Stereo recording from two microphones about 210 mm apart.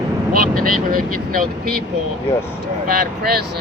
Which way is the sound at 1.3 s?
45° right (ahead or behind).